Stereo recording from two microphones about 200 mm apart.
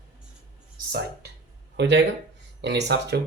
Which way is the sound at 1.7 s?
60° right (ahead or behind).